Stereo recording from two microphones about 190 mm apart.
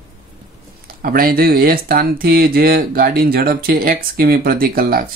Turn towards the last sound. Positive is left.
turn(degrees=-50)  # may be behind; listen again after turning